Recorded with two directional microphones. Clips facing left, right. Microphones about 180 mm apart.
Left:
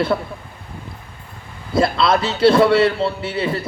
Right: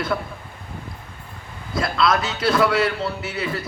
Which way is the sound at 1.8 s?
30° left (ahead or behind).